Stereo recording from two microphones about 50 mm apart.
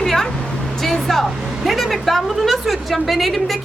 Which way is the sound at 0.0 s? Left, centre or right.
Centre.